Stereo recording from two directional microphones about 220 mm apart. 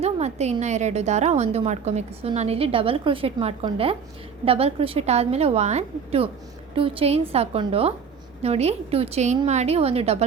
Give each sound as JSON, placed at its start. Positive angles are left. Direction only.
{"t": 0.0, "sound": "a woman's voice", "side_deg": -30}